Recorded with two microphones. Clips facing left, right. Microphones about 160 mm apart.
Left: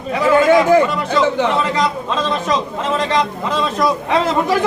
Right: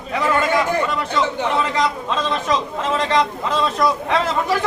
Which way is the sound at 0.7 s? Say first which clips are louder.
Left 7 dB; 90° left.